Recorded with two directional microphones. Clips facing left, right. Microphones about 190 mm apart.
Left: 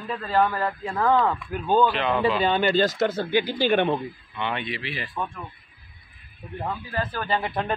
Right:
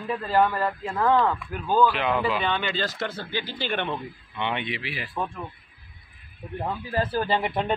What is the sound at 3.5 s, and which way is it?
Speech, 45° left (ahead or behind).